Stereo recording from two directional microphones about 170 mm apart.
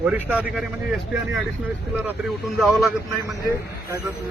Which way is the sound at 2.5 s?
Centre (ahead or behind).